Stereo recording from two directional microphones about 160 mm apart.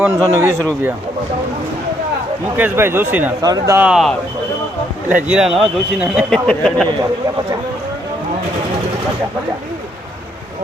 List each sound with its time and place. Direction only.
0.0 s a man's voice: 20° right (ahead or behind)
2.6 s speech: 15° right (ahead or behind)
3.4 s a man's voice: 25° right (ahead or behind)
3.8 s speech: 5° right (ahead or behind)